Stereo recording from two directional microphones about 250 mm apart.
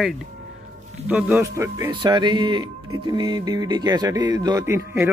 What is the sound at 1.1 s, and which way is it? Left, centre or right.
Music, centre.